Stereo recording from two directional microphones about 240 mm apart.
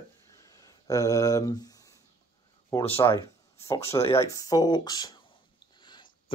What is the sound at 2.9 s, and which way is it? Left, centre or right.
Speech, left.